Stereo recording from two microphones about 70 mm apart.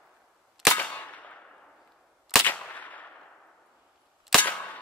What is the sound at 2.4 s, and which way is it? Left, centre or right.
Gunshot, left.